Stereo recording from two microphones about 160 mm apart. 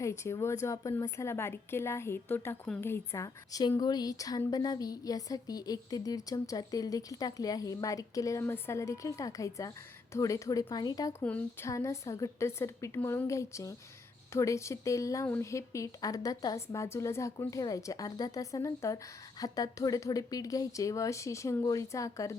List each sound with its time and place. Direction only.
0.0 s a woman's voice: 20° left (ahead or behind)
11.2 s a woman's voice: 15° left (ahead or behind)